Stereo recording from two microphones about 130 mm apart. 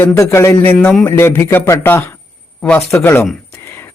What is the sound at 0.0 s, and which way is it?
Speech, 20° left (ahead or behind).